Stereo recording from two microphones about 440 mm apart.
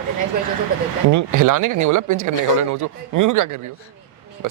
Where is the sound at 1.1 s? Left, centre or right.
Right.